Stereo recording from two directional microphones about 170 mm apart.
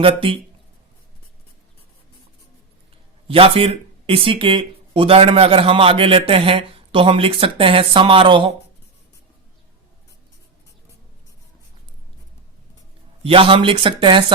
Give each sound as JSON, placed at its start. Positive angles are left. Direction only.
{"t": 0.0, "sound": "speech", "side_deg": -30}
{"t": 3.2, "sound": "speech", "side_deg": -35}
{"t": 13.2, "sound": "speech", "side_deg": -30}